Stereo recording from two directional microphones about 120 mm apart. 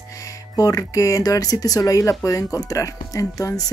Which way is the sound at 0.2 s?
30° left (ahead or behind).